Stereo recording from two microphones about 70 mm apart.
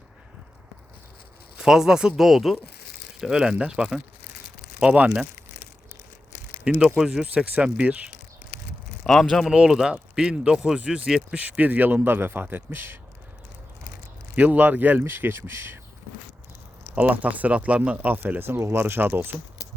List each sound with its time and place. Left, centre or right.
1.5 s speech: centre
4.8 s speech: centre
6.7 s speech: centre
9.0 s speech: centre
11.4 s speech: right
14.3 s speech: right
16.9 s speech: right